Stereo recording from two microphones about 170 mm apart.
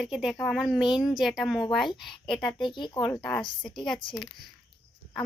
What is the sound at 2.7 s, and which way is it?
Speech, 25° left (ahead or behind).